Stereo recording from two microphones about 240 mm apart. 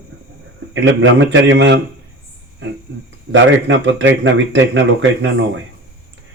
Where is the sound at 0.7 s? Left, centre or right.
Right.